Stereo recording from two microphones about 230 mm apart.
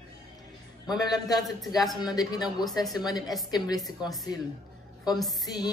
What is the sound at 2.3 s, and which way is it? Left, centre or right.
Speech, centre.